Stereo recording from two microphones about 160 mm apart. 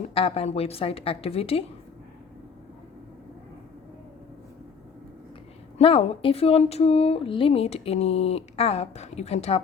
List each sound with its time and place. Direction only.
0.1 s speech: 35° left (ahead or behind)
5.7 s speech: 40° left (ahead or behind)